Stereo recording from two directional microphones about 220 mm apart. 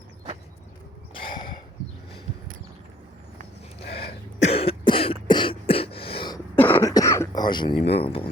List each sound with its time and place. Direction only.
1.1 s a sound: 20° left (ahead or behind)
3.8 s cough: 25° left (ahead or behind)
6.6 s cough: 10° left (ahead or behind)
7.9 s speech: 25° left (ahead or behind)